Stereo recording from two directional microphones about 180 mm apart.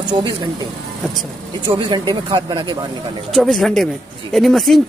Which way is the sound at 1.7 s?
25° right (ahead or behind).